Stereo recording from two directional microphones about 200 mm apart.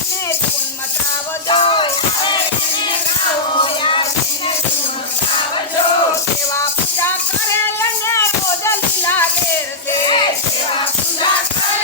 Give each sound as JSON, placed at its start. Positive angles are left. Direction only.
{"t": 1.5, "sound": "music", "side_deg": 25}
{"t": 3.6, "sound": "music", "side_deg": 25}
{"t": 7.8, "sound": "music", "side_deg": 15}
{"t": 10.0, "sound": "music", "side_deg": 25}